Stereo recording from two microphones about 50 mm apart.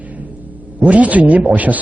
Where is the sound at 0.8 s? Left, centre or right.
Right.